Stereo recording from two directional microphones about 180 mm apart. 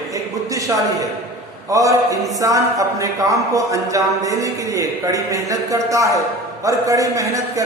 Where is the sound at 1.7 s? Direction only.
20° right (ahead or behind).